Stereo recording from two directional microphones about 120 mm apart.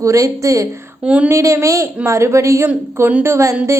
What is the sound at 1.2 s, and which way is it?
A woman's voice, 25° right (ahead or behind).